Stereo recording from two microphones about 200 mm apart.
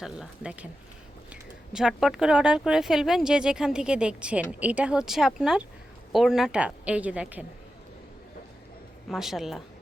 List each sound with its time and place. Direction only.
0.0 s speech: 5° right (ahead or behind)
9.0 s speech: centre (ahead or behind)